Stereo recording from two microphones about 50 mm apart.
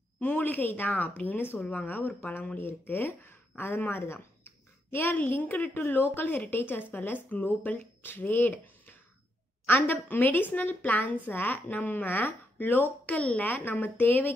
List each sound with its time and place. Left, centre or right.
0.2 s speech: left
1.6 s speech: left
1.9 s speech: left
5.1 s speech: left
13.5 s speech: left